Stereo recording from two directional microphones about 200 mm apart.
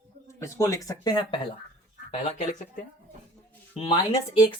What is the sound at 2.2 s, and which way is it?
Speech, 40° left (ahead or behind).